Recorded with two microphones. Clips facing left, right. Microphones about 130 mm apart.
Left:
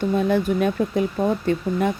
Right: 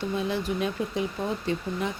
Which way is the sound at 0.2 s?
50° left (ahead or behind).